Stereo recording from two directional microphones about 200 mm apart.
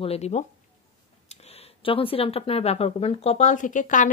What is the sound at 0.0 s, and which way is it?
Speech, 30° left (ahead or behind).